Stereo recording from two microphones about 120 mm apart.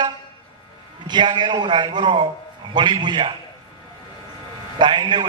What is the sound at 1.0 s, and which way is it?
A man's voice, 40° right (ahead or behind).